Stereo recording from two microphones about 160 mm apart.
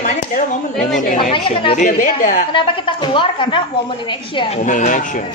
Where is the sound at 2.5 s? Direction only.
30° left (ahead or behind).